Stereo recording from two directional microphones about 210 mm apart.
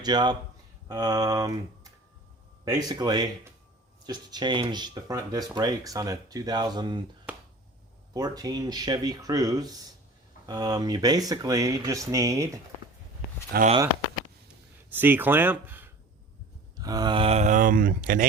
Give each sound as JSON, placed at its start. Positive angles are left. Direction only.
{"t": 0.0, "sound": "speech", "side_deg": -20}
{"t": 7.3, "sound": "finger snapping", "side_deg": -10}
{"t": 8.1, "sound": "speech", "side_deg": -20}
{"t": 13.5, "sound": "speech", "side_deg": -40}
{"t": 14.8, "sound": "speech", "side_deg": -10}